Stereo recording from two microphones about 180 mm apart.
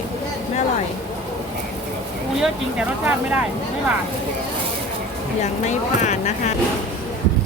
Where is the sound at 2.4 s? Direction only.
5° right (ahead or behind).